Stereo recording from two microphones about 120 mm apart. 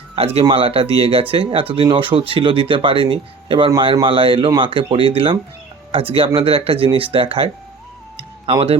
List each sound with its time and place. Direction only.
0.2 s speech: 55° right (ahead or behind)
8.1 s music: 50° right (ahead or behind)